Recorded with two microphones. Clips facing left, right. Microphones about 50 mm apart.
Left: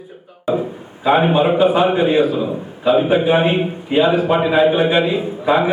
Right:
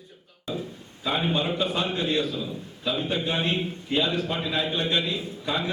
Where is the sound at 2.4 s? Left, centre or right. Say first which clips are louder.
Left 12 dB; left.